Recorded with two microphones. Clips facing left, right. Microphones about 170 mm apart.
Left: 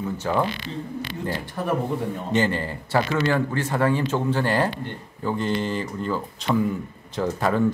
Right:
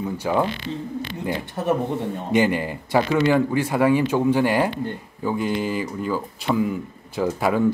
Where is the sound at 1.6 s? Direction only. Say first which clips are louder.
Right 2 dB; 20° right (ahead or behind).